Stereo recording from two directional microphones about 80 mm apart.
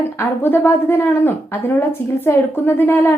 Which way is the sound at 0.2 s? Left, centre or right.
Left.